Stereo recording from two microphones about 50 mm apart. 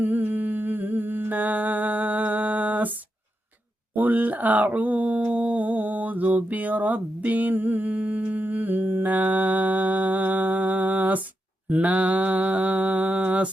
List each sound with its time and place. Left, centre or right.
0.0 s humming: right
3.9 s a sound: right
11.7 s mantra: right